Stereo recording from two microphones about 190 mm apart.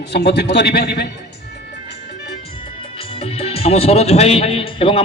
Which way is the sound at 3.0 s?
30° left (ahead or behind).